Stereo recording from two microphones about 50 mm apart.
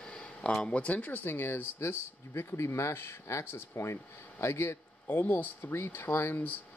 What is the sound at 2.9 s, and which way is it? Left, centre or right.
Speech, left.